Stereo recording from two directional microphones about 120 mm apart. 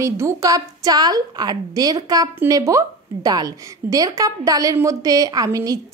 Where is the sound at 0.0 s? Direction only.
25° right (ahead or behind).